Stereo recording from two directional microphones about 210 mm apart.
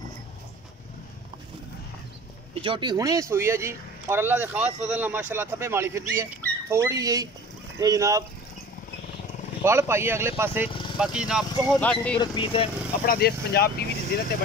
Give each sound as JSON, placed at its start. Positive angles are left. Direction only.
{"t": 2.5, "sound": "speech", "side_deg": -25}
{"t": 9.7, "sound": "speech", "side_deg": -10}
{"t": 10.7, "sound": "vehicle", "side_deg": 25}
{"t": 11.0, "sound": "speech", "side_deg": -5}
{"t": 12.2, "sound": "speech", "side_deg": 20}
{"t": 13.0, "sound": "speech", "side_deg": 45}